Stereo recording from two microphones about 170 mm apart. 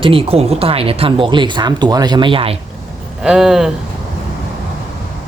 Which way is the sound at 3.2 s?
5° right (ahead or behind).